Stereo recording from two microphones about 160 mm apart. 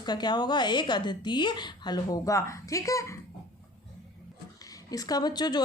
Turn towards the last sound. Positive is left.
turn(degrees=25)  # may be behind; listen again after turning